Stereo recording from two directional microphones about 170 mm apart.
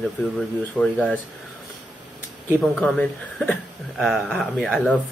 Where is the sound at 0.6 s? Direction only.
10° left (ahead or behind).